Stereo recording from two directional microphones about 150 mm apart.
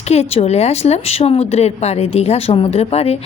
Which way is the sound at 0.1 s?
45° left (ahead or behind).